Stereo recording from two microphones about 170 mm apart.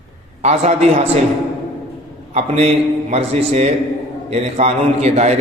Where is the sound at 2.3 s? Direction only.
40° right (ahead or behind).